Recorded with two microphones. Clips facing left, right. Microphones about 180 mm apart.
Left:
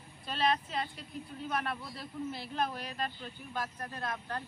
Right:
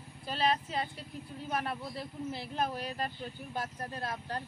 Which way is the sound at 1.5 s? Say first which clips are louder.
Right 2 dB; 30° right (ahead or behind).